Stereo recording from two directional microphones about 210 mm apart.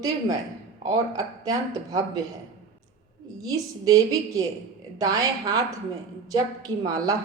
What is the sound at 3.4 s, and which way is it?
A woman's voice, 15° right (ahead or behind).